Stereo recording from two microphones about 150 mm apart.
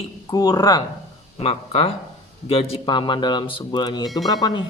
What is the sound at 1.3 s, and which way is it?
Speech, 40° left (ahead or behind).